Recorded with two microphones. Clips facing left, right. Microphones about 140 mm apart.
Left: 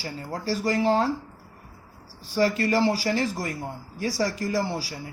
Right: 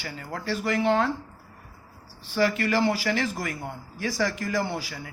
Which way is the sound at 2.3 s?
35° left (ahead or behind).